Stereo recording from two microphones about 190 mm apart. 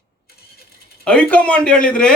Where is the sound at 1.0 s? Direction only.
5° left (ahead or behind).